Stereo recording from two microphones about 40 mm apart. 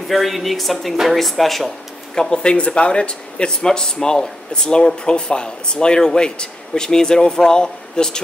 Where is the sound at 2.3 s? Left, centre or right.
Left.